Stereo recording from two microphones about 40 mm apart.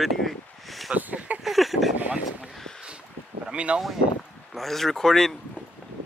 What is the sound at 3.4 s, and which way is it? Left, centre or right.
Speech, right.